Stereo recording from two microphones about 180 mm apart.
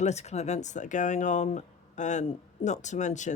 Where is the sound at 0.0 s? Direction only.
40° left (ahead or behind).